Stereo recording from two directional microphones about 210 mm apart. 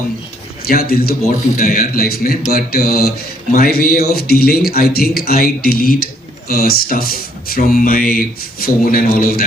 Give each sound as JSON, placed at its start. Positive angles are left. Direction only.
{"t": 0.7, "sound": "speech", "side_deg": 45}